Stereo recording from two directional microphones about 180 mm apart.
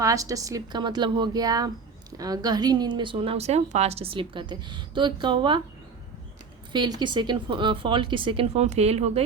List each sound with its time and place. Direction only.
0.0 s a woman's voice: 20° right (ahead or behind)
6.7 s a woman's voice: 25° right (ahead or behind)